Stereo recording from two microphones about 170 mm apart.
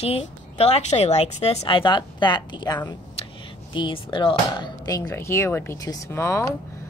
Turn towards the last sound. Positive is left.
turn(degrees=15)  # may be behind; listen again after turning